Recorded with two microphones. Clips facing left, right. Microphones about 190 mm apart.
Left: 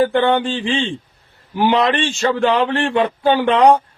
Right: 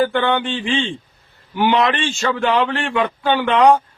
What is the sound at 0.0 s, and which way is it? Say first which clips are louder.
A man's voice: left 3 dB; 30° left (ahead or behind).